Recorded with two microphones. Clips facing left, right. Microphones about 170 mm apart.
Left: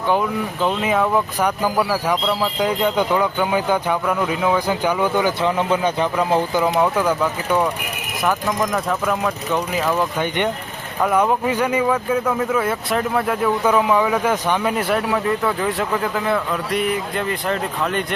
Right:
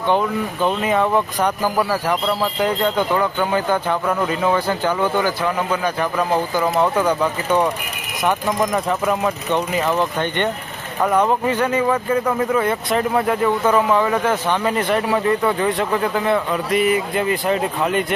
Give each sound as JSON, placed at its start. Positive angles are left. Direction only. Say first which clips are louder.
{"t": 0.8, "sound": "speech", "louder": "even", "side_deg": 5}
{"t": 10.0, "sound": "speech", "louder": "even", "side_deg": 10}